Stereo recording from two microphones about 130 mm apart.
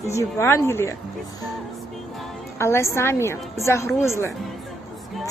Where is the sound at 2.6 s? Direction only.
20° left (ahead or behind).